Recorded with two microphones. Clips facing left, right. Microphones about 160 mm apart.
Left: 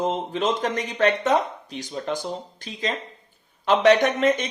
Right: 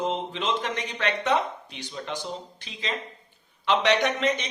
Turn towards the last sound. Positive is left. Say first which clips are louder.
# left 5 dB
turn(degrees=50)  # may be behind; listen again after turning